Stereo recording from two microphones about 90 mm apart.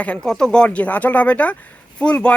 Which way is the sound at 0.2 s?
5° left (ahead or behind).